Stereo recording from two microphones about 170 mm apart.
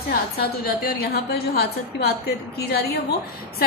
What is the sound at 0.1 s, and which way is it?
A woman's voice, 60° left (ahead or behind).